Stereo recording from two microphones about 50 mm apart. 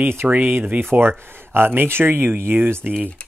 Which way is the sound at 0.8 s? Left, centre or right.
Right.